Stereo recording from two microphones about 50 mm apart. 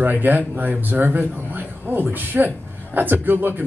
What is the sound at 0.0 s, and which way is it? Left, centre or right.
Speech, right.